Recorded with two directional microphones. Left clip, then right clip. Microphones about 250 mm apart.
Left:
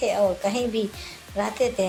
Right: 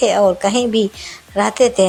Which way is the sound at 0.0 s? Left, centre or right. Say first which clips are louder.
Right 9 dB; right.